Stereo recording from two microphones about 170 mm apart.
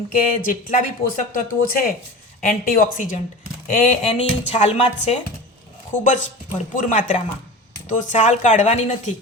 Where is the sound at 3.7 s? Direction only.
40° left (ahead or behind).